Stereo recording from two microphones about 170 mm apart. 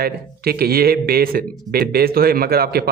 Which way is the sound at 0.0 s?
65° right (ahead or behind).